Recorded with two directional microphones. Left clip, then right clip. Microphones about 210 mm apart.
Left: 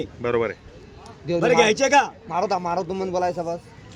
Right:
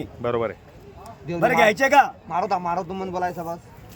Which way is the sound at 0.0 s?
5° right (ahead or behind).